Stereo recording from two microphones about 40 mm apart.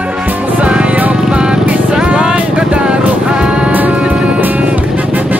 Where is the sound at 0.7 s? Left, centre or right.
Right.